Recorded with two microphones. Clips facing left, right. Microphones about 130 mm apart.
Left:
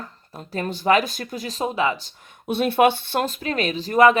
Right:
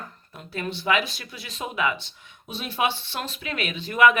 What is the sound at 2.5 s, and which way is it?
Speech, 55° left (ahead or behind).